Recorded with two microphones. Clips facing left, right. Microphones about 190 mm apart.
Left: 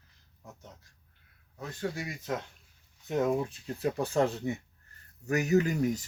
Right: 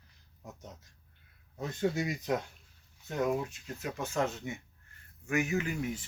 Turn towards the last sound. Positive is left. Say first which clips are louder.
# left 7 dB
turn(degrees=40)  # may be behind; listen again after turning